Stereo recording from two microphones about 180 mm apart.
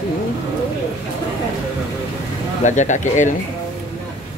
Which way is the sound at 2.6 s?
45° left (ahead or behind).